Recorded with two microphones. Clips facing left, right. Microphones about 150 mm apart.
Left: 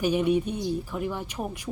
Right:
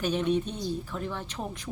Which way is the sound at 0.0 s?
10° left (ahead or behind).